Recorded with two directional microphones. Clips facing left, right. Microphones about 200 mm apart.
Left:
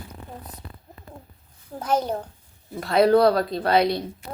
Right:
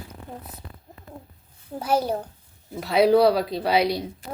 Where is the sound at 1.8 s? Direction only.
10° right (ahead or behind).